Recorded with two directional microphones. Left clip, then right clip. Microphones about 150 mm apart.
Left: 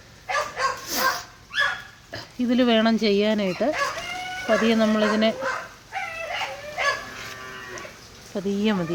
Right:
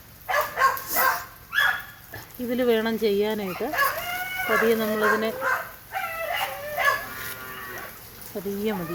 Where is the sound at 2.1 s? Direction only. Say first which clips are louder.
Left 5 dB; 90° left.